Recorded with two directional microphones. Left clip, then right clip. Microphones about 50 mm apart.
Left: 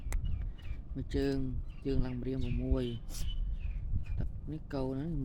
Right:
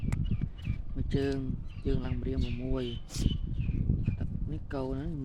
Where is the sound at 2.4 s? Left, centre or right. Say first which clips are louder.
Right 2 dB; centre.